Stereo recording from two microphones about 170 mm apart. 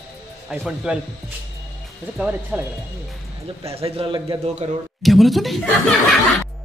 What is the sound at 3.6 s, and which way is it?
A man's voice, 35° right (ahead or behind).